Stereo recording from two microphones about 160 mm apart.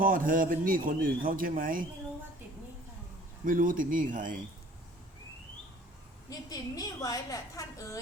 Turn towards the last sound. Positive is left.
turn(degrees=20)  # may be behind; listen again after turning